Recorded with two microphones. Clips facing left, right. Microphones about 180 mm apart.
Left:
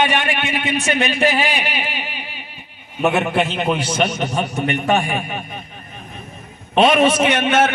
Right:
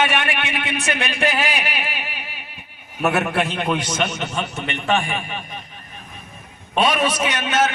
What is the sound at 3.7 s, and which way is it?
A man's voice, 30° left (ahead or behind).